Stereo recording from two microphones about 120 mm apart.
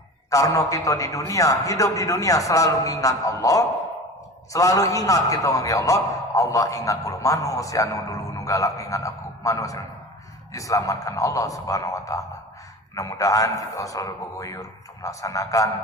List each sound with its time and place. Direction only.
0.3 s a man's voice: 25° left (ahead or behind)